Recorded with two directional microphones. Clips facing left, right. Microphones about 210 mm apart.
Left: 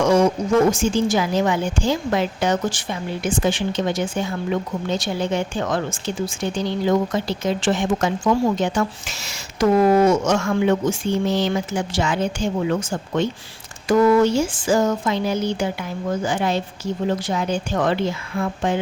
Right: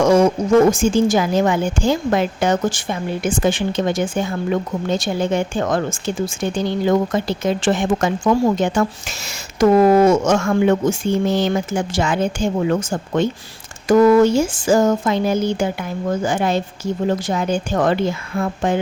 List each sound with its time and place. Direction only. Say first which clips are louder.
0.0 s speech: right 3 dB; 45° right (ahead or behind)